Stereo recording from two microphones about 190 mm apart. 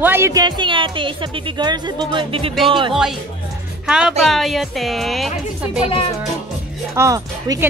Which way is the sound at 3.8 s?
5° right (ahead or behind).